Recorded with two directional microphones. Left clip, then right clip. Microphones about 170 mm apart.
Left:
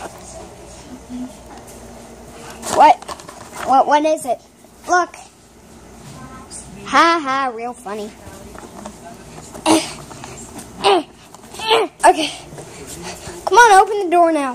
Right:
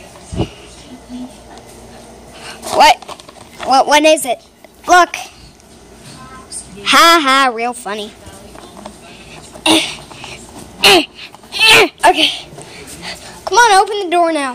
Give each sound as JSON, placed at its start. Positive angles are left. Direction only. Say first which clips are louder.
{"t": 2.4, "sound": "dog", "louder": "right 2 dB", "side_deg": 0}
{"t": 3.6, "sound": "speech", "louder": "right 3 dB", "side_deg": 5}
{"t": 4.0, "sound": "a woman's voice", "louder": "right 7 dB", "side_deg": -15}
{"t": 6.8, "sound": "a woman's voice", "louder": "right 6 dB", "side_deg": -20}
{"t": 9.6, "sound": "a sound", "louder": "right 3 dB", "side_deg": 0}
{"t": 10.8, "sound": "a sound", "louder": "right 6 dB", "side_deg": -20}
{"t": 12.0, "sound": "speech", "louder": "right 3 dB", "side_deg": -5}
{"t": 13.0, "sound": "babbling", "louder": "right 4 dB", "side_deg": 0}
{"t": 13.6, "sound": "speech", "louder": "even", "side_deg": 5}